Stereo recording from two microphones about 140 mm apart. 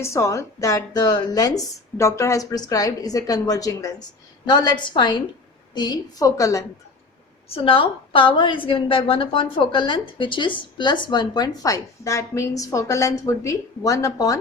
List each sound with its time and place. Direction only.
0.0 s a woman's voice: 20° left (ahead or behind)
7.4 s a woman's voice: 40° left (ahead or behind); by 14.3 s 25° left (ahead or behind)